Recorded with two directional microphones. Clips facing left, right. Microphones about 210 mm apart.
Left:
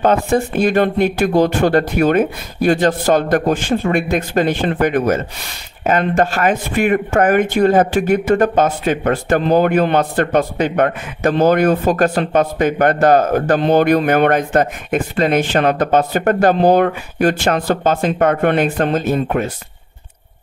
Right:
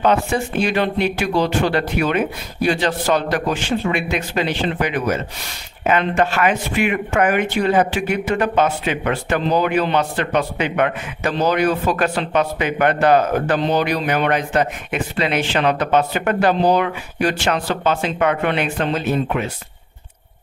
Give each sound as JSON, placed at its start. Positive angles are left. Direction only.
{"t": 0.0, "sound": "speech", "side_deg": 45}